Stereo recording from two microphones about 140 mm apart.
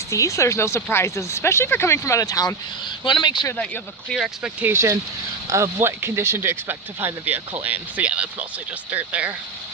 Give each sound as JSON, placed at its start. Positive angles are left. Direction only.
{"t": 0.1, "sound": "speech", "side_deg": 20}
{"t": 4.1, "sound": "speech", "side_deg": -5}
{"t": 4.7, "sound": "speech", "side_deg": -20}